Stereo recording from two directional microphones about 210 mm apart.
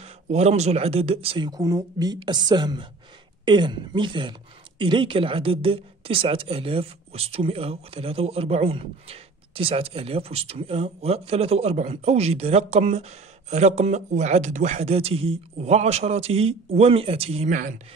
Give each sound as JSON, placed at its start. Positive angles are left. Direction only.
{"t": 0.0, "sound": "speech", "side_deg": -30}